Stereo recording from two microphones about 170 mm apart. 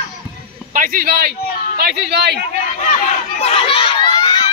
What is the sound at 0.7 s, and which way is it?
Speech, 55° right (ahead or behind).